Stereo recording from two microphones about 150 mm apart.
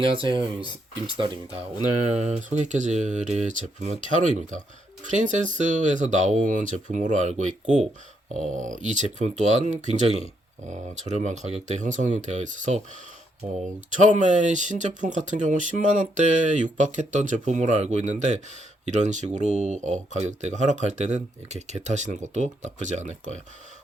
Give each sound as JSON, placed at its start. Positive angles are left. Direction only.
{"t": 0.0, "sound": "speech", "side_deg": -35}
{"t": 2.0, "sound": "speech", "side_deg": -50}
{"t": 13.9, "sound": "speech", "side_deg": -55}